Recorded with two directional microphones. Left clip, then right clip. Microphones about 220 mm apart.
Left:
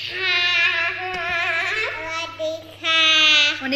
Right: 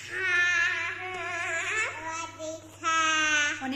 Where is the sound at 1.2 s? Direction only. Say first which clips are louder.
Left 11 dB; 20° left (ahead or behind).